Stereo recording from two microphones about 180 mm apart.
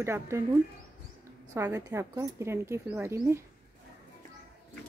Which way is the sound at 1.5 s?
15° right (ahead or behind).